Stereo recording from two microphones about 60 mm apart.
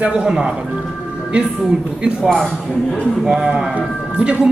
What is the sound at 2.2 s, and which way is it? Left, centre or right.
Speech, centre.